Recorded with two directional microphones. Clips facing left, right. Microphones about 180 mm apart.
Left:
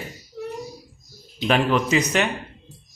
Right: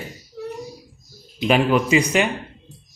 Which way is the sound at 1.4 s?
10° right (ahead or behind).